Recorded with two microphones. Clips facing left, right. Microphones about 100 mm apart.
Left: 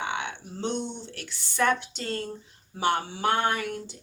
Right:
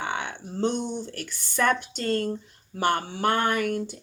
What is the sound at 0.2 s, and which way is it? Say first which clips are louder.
Speech: right 5 dB; 45° right (ahead or behind).